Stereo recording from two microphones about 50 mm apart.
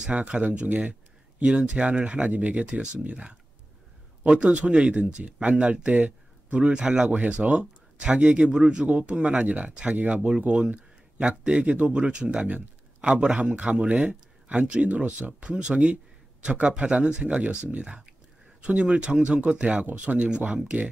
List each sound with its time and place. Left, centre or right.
0.0 s speech: right